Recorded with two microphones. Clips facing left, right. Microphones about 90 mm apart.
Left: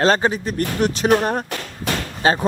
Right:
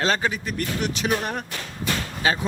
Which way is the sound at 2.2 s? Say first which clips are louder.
Left 6 dB; 40° left (ahead or behind).